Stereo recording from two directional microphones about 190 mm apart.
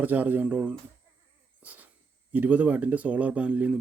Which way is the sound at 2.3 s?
10° right (ahead or behind).